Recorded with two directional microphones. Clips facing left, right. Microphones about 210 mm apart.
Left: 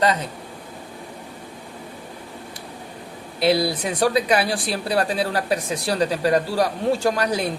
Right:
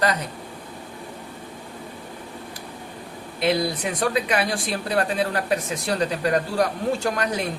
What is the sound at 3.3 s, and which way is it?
Speech, 30° left (ahead or behind).